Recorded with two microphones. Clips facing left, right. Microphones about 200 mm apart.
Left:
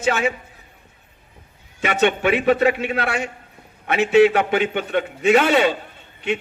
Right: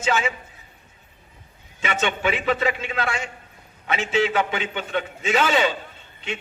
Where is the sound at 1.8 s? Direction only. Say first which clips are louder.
Left 6 dB; 60° left (ahead or behind).